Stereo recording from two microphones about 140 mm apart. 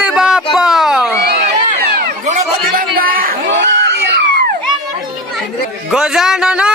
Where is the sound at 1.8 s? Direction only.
90° right.